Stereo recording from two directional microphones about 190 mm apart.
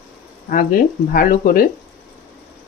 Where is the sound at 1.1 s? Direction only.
45° left (ahead or behind).